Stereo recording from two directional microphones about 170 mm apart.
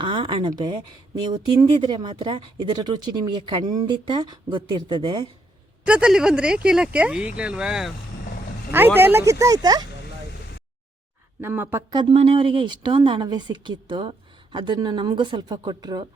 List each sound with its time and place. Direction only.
0.0 s speech: 30° right (ahead or behind)
5.8 s speech: 5° right (ahead or behind)
9.0 s speech: 15° right (ahead or behind)
11.3 s speech: 10° right (ahead or behind)
11.9 s speech: 25° right (ahead or behind)